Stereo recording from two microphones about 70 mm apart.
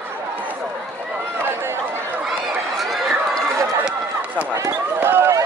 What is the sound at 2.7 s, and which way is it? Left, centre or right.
Run, centre.